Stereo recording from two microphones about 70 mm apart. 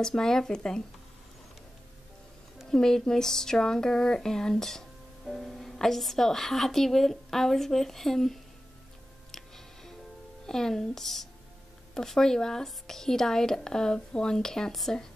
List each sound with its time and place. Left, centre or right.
0.0 s speech: centre
2.6 s speech: centre
10.4 s speech: centre